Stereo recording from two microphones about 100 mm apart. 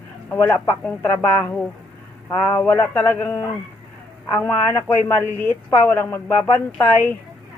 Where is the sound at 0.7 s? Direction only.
20° left (ahead or behind).